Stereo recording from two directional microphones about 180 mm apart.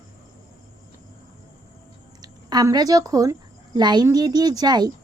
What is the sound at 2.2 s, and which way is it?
A woman's voice, 20° right (ahead or behind).